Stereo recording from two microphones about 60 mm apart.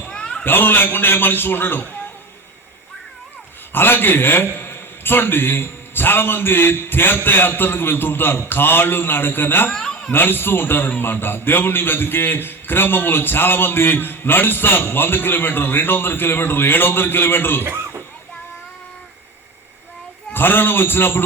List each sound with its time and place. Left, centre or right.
0.1 s a sound: centre
0.4 s a man's voice: left
3.7 s a man's voice: left
17.6 s chuckle: right
20.3 s a man's voice: left